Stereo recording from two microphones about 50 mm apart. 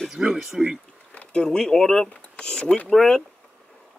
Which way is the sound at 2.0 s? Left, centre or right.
Left.